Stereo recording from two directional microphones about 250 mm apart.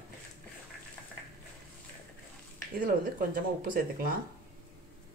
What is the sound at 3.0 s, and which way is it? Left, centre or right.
Speech, right.